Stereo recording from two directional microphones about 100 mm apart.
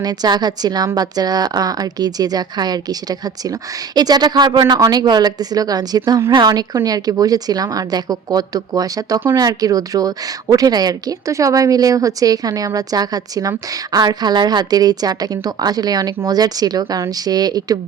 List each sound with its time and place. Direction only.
0.0 s a woman's voice: 45° right (ahead or behind)